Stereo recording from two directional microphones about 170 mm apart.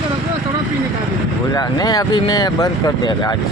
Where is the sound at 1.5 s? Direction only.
25° left (ahead or behind).